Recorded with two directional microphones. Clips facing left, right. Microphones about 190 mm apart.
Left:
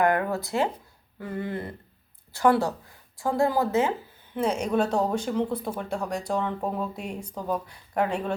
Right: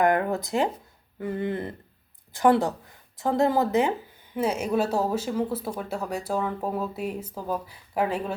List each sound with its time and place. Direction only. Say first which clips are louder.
0.0 s speech: right 1 dB; 20° right (ahead or behind)
4.4 s speech: even; 5° right (ahead or behind)